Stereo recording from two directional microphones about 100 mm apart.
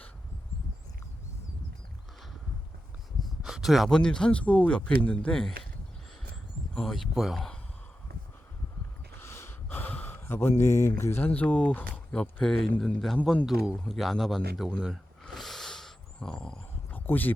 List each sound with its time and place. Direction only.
3.2 s speech: 5° right (ahead or behind)
6.7 s speech: centre (ahead or behind)
9.1 s gasp: 25° left (ahead or behind)
11.3 s speech: 15° left (ahead or behind)
12.4 s speech: 5° left (ahead or behind)
16.9 s a sound: 20° left (ahead or behind)